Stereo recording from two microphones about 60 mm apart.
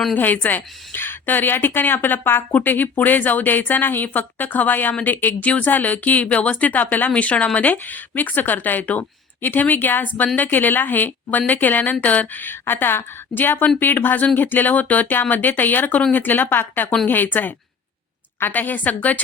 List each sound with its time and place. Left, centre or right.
0.1 s a woman's voice: left